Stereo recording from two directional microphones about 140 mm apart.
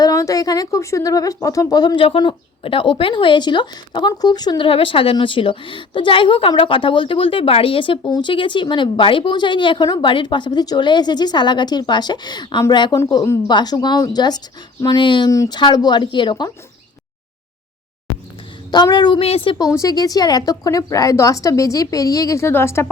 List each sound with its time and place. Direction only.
0.0 s a woman's voice: 25° left (ahead or behind)
18.7 s speech: 30° left (ahead or behind)
19.2 s a woman's voice: 40° left (ahead or behind); by 22.9 s 20° left (ahead or behind)